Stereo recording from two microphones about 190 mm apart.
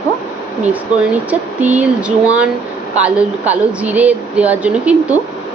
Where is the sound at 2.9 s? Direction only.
10° right (ahead or behind).